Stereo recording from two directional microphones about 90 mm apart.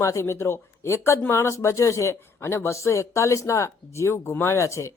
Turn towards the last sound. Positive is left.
turn(degrees=35)  # may be behind; listen again after turning